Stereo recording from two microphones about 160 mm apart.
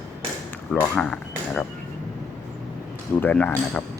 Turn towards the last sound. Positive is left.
turn(degrees=10)  # may be behind; listen again after turning